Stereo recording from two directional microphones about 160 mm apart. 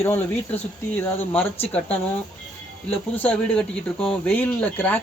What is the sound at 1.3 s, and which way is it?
Speech, 10° left (ahead or behind).